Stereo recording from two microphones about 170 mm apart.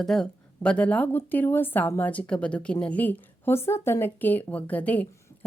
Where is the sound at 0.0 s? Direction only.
5° left (ahead or behind).